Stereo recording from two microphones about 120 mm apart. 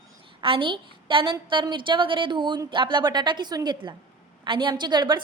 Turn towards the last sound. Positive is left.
turn(degrees=-35)  # may be behind; listen again after turning